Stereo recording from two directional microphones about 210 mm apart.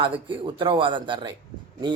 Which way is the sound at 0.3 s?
25° right (ahead or behind).